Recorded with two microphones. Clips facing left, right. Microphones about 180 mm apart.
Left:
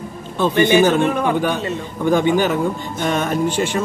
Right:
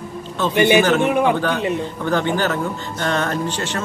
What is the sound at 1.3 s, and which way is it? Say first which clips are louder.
Speech: even; 10° left (ahead or behind).